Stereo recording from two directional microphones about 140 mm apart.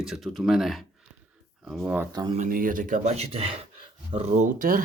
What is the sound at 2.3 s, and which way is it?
Speech, 75° right (ahead or behind).